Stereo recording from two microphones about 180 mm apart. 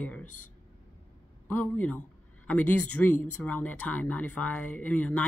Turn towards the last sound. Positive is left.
turn(degrees=5)  # may be behind; listen again after turning